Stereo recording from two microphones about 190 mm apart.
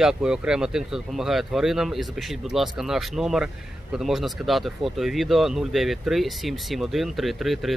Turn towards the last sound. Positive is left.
turn(degrees=0)  # may be behind; listen again after turning